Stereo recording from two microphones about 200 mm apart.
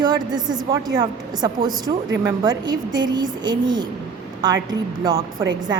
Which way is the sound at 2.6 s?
20° right (ahead or behind).